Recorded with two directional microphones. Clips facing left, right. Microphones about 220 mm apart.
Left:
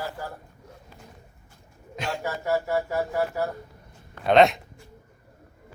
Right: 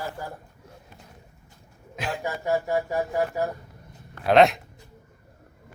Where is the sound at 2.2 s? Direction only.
15° right (ahead or behind).